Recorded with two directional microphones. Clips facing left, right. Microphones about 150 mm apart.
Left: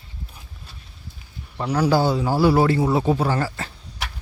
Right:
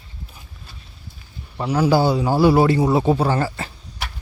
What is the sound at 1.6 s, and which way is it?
A man's voice, 5° right (ahead or behind).